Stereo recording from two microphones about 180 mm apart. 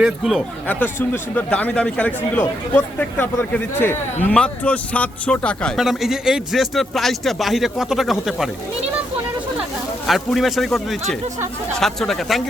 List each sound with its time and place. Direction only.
0.0 s speech: centre (ahead or behind)
0.8 s speech: 10° left (ahead or behind)
10.1 s speech: centre (ahead or behind)
11.8 s speech: centre (ahead or behind)